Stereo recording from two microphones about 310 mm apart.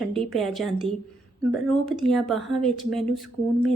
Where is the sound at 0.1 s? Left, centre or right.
Centre.